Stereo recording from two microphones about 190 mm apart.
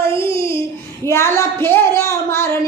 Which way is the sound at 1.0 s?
15° left (ahead or behind).